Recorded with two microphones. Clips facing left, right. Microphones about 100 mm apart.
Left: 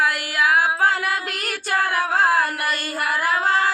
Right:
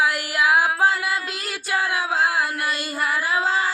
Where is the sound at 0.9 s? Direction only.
65° left (ahead or behind).